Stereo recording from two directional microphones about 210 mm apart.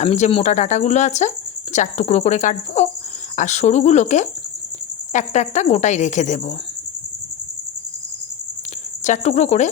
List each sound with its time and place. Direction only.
0.0 s speech: 30° left (ahead or behind)
9.0 s speech: 35° left (ahead or behind)